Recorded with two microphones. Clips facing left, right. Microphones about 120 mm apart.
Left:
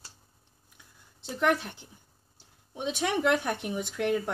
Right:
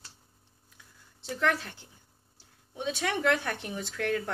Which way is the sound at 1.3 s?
20° left (ahead or behind).